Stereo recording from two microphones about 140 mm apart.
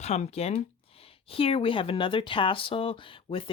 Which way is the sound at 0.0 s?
50° left (ahead or behind).